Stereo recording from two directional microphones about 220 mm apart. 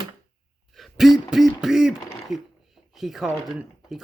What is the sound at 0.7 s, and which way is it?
Speech, centre (ahead or behind).